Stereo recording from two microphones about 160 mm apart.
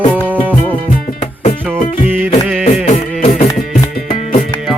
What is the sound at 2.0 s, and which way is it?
Music, 5° right (ahead or behind).